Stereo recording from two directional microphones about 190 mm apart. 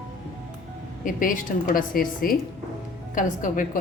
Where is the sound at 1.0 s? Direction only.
45° left (ahead or behind).